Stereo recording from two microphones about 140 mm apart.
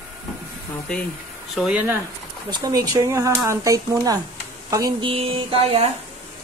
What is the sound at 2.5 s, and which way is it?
Speech, 25° right (ahead or behind).